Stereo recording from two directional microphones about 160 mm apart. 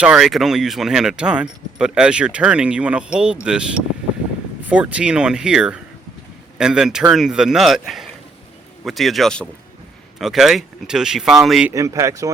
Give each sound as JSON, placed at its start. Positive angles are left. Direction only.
{"t": 0.0, "sound": "speech", "side_deg": -5}
{"t": 11.7, "sound": "speech", "side_deg": -20}